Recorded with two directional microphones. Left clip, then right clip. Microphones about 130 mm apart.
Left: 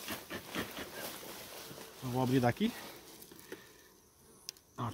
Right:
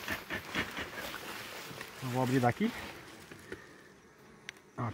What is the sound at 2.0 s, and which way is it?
Speech, 30° right (ahead or behind).